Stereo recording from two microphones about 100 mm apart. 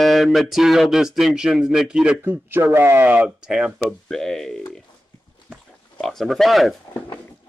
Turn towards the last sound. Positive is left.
turn(degrees=0)  # may be behind; listen again after turning